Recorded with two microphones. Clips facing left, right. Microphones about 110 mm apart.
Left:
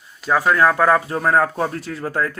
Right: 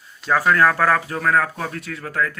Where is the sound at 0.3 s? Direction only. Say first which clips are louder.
Left 1 dB; 15° left (ahead or behind).